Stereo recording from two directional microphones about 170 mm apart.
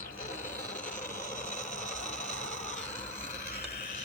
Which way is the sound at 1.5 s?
45° left (ahead or behind).